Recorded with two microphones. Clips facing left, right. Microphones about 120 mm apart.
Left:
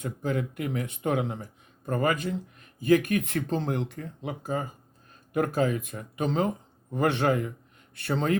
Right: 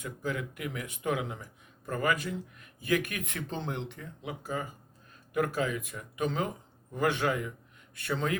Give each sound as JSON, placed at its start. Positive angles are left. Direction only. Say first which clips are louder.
{"t": 0.0, "sound": "speech", "louder": "left 5 dB", "side_deg": 30}